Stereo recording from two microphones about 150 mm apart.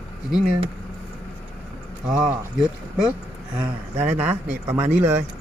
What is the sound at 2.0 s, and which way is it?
Speech, 5° right (ahead or behind).